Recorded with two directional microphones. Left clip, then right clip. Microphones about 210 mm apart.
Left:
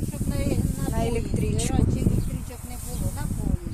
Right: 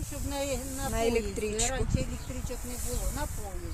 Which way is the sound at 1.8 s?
15° right (ahead or behind).